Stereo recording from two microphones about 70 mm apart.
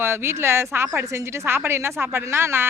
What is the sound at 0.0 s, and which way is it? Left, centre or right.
A woman's voice, right.